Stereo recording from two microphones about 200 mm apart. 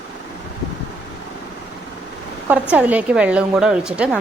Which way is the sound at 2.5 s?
5° right (ahead or behind).